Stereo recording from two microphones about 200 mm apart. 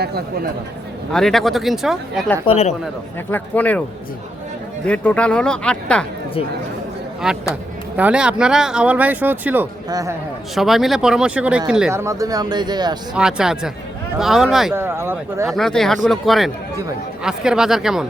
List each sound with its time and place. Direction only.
0.0 s speech: 50° right (ahead or behind)
1.1 s speech: centre (ahead or behind)
2.4 s speech: 30° left (ahead or behind)
3.3 s speech: 10° left (ahead or behind)
4.9 s speech: 5° left (ahead or behind)
7.2 s speech: 5° right (ahead or behind)
10.5 s speech: centre (ahead or behind); by 13.0 s 20° right (ahead or behind)
13.1 s speech: 5° right (ahead or behind)
15.4 s speech: centre (ahead or behind)